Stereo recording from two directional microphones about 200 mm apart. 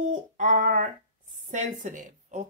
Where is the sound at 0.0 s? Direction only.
40° right (ahead or behind).